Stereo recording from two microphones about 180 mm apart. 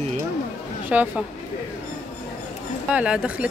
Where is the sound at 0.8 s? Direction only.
10° right (ahead or behind).